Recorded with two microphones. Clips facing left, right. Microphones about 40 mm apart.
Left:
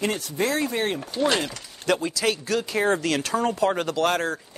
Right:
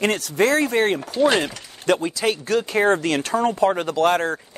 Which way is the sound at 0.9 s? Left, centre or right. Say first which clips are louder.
Right 5 dB; centre.